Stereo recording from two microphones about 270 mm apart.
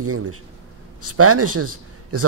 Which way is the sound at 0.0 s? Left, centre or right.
Right.